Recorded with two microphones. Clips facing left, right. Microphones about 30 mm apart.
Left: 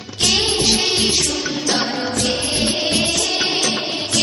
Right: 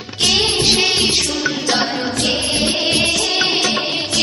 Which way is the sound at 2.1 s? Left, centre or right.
Right.